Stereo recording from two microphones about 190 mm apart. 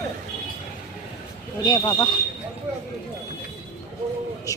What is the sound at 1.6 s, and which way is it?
Speech, 20° left (ahead or behind).